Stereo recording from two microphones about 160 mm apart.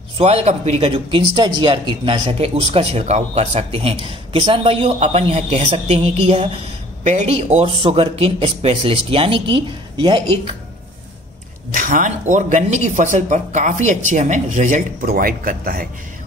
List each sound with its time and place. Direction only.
0.2 s speech: 40° right (ahead or behind)
11.7 s speech: 55° right (ahead or behind)